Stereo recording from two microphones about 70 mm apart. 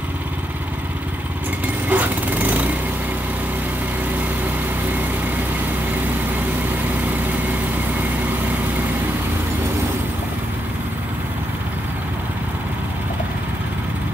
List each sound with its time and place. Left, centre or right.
1.9 s lawn mower: right